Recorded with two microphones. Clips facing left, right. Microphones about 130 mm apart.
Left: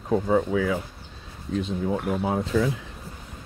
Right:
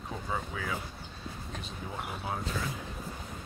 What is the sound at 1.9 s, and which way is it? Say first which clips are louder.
Speech: left 10 dB; 85° left.